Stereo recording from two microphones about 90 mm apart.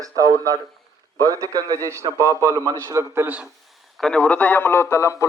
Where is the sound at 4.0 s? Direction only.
10° left (ahead or behind); by 5.2 s 30° left (ahead or behind).